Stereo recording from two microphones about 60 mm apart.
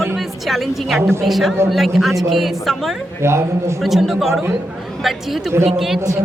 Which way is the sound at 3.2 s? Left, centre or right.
Right.